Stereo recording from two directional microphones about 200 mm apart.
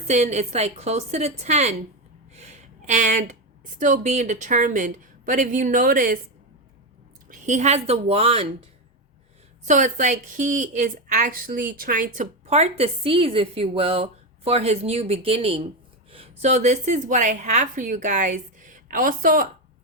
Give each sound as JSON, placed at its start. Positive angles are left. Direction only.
{"t": 0.1, "sound": "a woman's voice", "side_deg": -35}
{"t": 2.3, "sound": "a sound", "side_deg": -35}
{"t": 3.8, "sound": "a woman's voice", "side_deg": -40}
{"t": 7.3, "sound": "a woman's voice", "side_deg": -35}
{"t": 9.6, "sound": "a woman's voice", "side_deg": -40}